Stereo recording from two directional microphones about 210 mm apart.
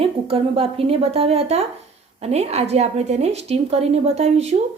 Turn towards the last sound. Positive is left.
turn(degrees=-30)  # may be behind; listen again after turning